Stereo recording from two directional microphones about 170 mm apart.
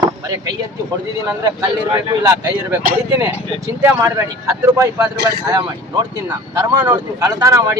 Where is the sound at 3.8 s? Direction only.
20° right (ahead or behind).